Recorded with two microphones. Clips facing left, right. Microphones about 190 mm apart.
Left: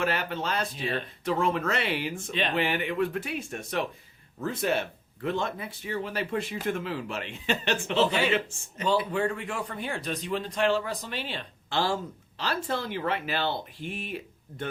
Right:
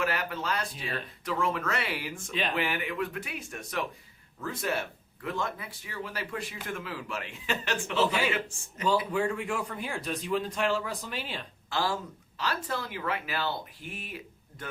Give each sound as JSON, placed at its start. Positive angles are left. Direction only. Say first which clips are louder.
{"t": 0.0, "sound": "speech", "louder": "left 2 dB", "side_deg": 30}
{"t": 2.9, "sound": "speech", "louder": "left 5 dB", "side_deg": 35}
{"t": 9.1, "sound": "a man's voice", "louder": "even", "side_deg": -5}
{"t": 11.7, "sound": "speech", "louder": "left 3 dB", "side_deg": 30}